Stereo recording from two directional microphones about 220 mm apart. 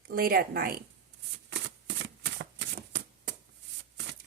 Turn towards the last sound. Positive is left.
turn(degrees=-50)  # may be behind; listen again after turning